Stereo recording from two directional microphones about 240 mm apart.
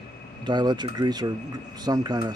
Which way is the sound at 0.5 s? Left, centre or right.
Centre.